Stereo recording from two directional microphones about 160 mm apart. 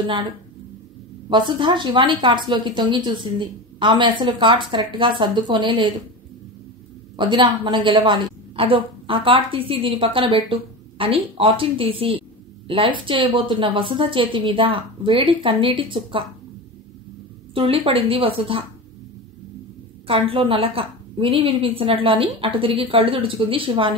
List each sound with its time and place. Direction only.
1.3 s a woman's voice: 30° right (ahead or behind)
7.2 s a woman's voice: 30° right (ahead or behind)
17.6 s a woman's voice: 35° right (ahead or behind)
20.1 s a woman's voice: 35° right (ahead or behind)